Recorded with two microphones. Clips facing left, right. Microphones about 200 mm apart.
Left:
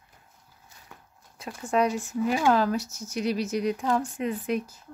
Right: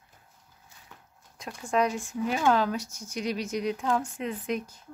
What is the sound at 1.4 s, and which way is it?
Speech, 5° left (ahead or behind).